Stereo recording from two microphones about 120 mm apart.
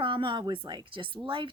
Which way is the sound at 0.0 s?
45° right (ahead or behind).